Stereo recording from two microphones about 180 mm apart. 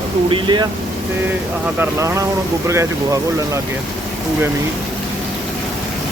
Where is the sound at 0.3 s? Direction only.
25° right (ahead or behind).